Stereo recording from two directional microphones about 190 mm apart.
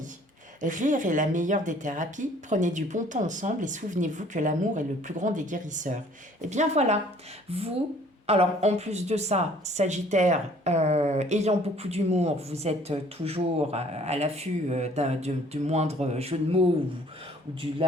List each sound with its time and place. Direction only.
0.6 s speech: 40° right (ahead or behind)